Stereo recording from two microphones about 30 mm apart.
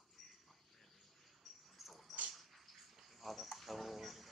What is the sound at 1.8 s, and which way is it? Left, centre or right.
Dog, centre.